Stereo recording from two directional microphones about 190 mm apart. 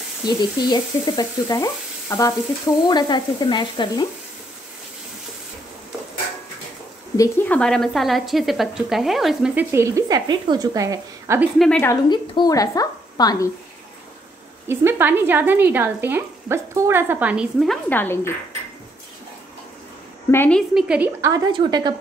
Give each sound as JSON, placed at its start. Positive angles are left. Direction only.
{"t": 0.4, "sound": "frying", "side_deg": 20}
{"t": 7.2, "sound": "a woman's voice", "side_deg": 10}
{"t": 11.5, "sound": "a woman's voice", "side_deg": 0}
{"t": 11.8, "sound": "frying", "side_deg": 20}
{"t": 14.7, "sound": "speech", "side_deg": -10}
{"t": 20.2, "sound": "a woman's voice", "side_deg": 10}
{"t": 21.2, "sound": "a woman's voice", "side_deg": -20}